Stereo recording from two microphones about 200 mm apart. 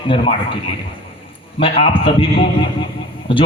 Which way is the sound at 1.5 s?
25° left (ahead or behind).